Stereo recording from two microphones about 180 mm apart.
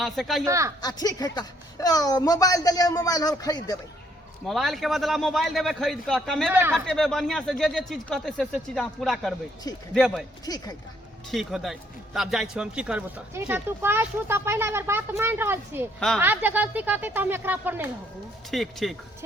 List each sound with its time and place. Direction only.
0.0 s speech: centre (ahead or behind)
0.4 s speech: 15° right (ahead or behind)
0.8 s a woman's voice: 20° left (ahead or behind)
4.4 s speech: centre (ahead or behind)
6.5 s speech: 10° right (ahead or behind)
6.8 s speech: centre (ahead or behind)
10.4 s a woman's voice: 20° left (ahead or behind)
11.3 s speech: centre (ahead or behind)
16.0 s speech: centre (ahead or behind)
16.2 s speech: 10° right (ahead or behind)
18.5 s speech: centre (ahead or behind)